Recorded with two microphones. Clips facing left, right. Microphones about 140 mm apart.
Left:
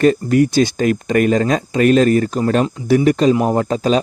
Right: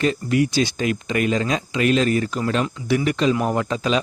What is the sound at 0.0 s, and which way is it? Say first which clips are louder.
Speech: left 7 dB; 45° left (ahead or behind).